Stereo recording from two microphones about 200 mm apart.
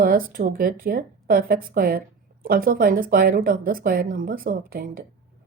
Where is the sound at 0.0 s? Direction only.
45° right (ahead or behind).